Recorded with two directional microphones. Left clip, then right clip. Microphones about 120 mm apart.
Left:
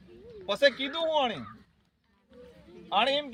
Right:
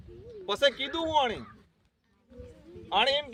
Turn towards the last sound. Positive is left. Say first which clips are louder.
# even
turn(degrees=-20)  # may be behind; listen again after turning